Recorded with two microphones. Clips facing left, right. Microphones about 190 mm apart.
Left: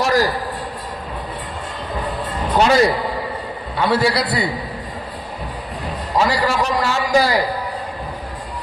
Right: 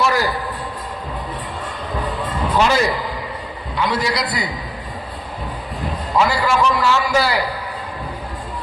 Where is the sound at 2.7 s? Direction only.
35° left (ahead or behind).